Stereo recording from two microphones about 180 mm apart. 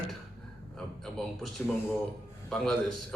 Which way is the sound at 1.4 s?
Centre (ahead or behind).